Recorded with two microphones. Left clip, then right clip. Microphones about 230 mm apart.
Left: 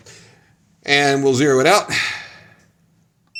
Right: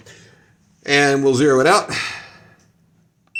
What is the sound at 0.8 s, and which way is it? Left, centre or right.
Speech, left.